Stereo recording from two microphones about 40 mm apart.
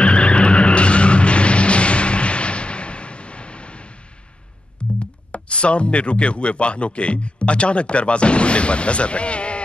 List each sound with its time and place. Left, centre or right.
0.0 s skidding: left
4.8 s music: left
5.3 s speech: left